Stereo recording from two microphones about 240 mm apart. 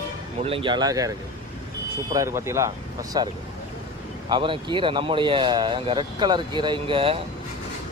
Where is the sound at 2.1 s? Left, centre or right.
Centre.